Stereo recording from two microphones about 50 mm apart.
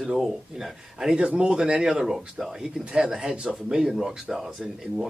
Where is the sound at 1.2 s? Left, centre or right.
Centre.